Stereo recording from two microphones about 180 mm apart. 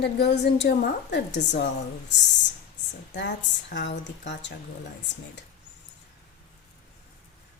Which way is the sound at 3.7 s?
80° left.